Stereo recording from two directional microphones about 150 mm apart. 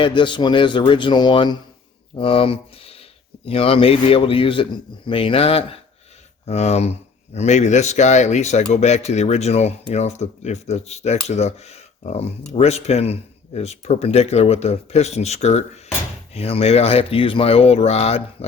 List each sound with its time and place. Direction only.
0.0 s a man's voice: 30° left (ahead or behind)